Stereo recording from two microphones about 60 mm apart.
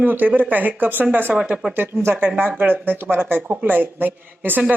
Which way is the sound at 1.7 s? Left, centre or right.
Right.